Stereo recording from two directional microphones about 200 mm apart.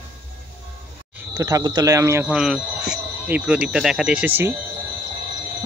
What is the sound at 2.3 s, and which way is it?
Speech, centre (ahead or behind).